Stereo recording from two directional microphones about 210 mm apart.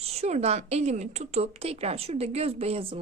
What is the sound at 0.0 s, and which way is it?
A woman's voice, 30° right (ahead or behind).